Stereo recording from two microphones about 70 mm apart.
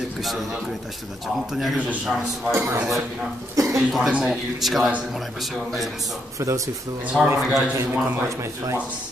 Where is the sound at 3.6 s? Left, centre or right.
Right.